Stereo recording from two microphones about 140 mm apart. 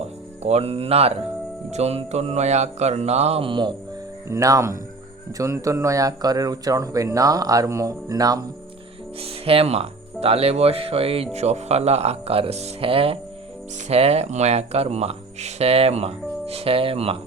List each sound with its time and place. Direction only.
0.0 s speech: 50° right (ahead or behind)
4.3 s speech: 25° right (ahead or behind)
9.2 s speech: 40° right (ahead or behind)